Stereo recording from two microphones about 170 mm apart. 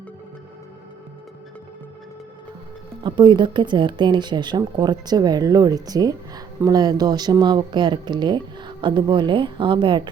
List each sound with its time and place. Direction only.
3.0 s speech: 30° right (ahead or behind)